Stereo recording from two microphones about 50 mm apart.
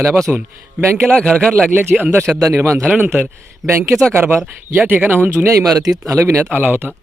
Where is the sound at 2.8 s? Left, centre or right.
Right.